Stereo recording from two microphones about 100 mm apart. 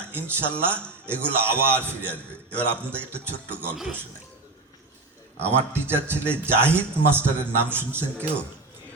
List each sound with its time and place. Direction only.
0.1 s a man's voice: 20° right (ahead or behind)
2.5 s a man's voice: 15° left (ahead or behind)
2.9 s a man's voice: 20° right (ahead or behind)
5.4 s a man's voice: 25° right (ahead or behind)